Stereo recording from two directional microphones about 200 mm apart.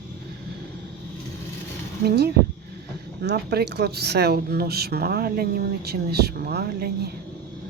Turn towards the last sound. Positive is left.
turn(degrees=-50)  # may be behind; listen again after turning